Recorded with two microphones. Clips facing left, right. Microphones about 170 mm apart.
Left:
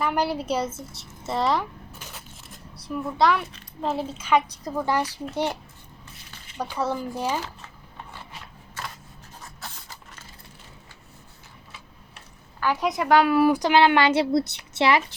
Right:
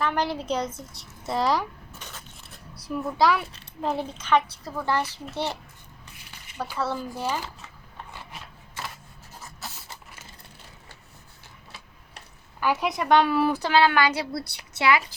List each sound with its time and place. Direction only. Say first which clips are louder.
0.0 s a child's voice: left 2 dB; 10° left (ahead or behind)
6.7 s a child's voice: left 2 dB; 15° left (ahead or behind)
9.4 s a sound: right 1 dB; 5° right (ahead or behind)
12.5 s a woman's voice: left 1 dB; 10° right (ahead or behind)
12.9 s a woman's voice: left 2 dB; 5° left (ahead or behind); by 15.0 s 30° left (ahead or behind)